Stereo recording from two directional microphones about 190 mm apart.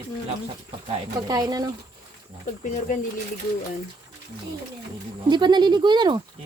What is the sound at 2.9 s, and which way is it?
Speech, 40° left (ahead or behind).